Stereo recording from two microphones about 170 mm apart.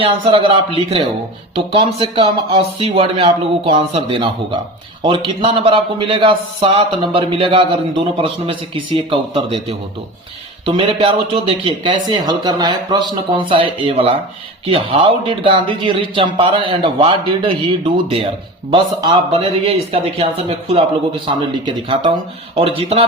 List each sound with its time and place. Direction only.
0.0 s speech: 30° right (ahead or behind)
22.5 s speech: 35° right (ahead or behind)